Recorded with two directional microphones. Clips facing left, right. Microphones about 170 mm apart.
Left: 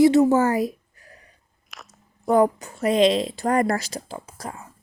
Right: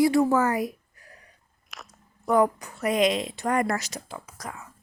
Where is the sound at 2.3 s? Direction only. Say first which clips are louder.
Left 3 dB; 30° left (ahead or behind).